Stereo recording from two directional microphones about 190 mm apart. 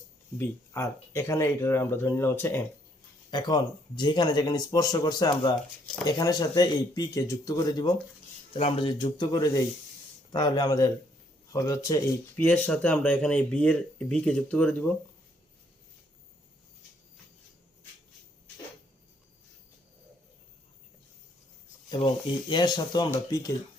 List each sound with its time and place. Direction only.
0.3 s speech: 15° left (ahead or behind)
12.4 s speech: 5° left (ahead or behind)
21.8 s speech: 25° left (ahead or behind)